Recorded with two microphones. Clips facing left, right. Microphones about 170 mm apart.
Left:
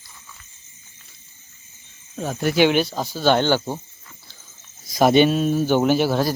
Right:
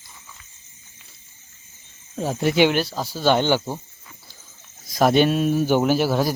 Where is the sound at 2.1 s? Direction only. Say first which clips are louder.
Right 1 dB; 25° right (ahead or behind).